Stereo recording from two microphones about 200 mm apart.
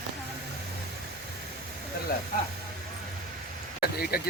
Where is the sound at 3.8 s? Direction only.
50° left (ahead or behind).